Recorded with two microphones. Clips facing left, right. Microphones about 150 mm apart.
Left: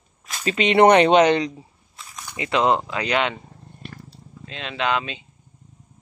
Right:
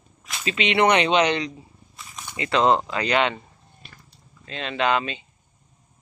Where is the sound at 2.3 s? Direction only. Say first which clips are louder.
Even; 15° left (ahead or behind).